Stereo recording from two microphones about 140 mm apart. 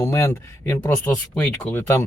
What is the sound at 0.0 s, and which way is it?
Speech, 20° left (ahead or behind).